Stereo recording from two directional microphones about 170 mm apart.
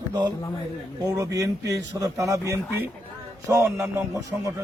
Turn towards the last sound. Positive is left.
turn(degrees=-20)  # may be behind; listen again after turning